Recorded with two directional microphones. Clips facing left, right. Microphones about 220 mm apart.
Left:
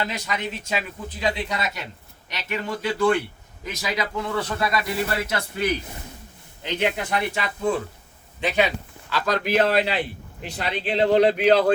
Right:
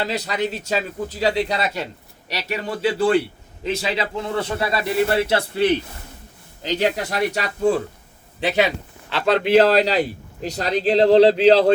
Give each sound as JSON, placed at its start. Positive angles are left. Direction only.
{"t": 0.0, "sound": "a man's voice", "side_deg": -35}